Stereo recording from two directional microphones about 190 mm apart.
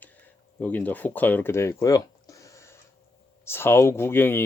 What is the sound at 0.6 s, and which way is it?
Speech, 10° left (ahead or behind).